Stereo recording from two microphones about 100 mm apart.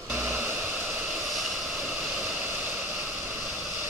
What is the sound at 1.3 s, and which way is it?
Vehicle, 5° right (ahead or behind).